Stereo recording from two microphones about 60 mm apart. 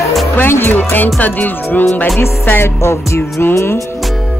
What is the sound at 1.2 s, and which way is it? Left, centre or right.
Music, left.